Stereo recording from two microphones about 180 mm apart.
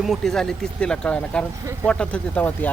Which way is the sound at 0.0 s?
Centre (ahead or behind).